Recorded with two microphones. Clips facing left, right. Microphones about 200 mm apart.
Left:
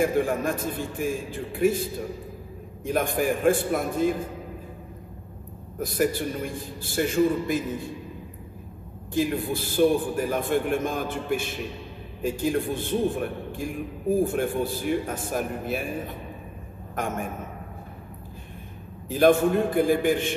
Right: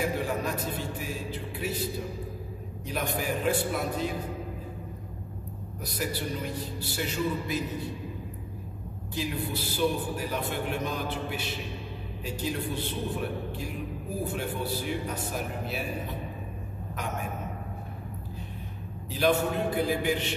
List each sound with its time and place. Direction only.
0.0 s a man's voice: 50° left (ahead or behind)
5.8 s a man's voice: 50° left (ahead or behind)
9.1 s a man's voice: 50° left (ahead or behind)
19.0 s a man's voice: 50° left (ahead or behind)